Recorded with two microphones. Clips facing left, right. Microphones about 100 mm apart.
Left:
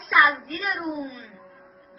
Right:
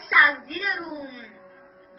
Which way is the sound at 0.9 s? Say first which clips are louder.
Left 3 dB; 30° left (ahead or behind).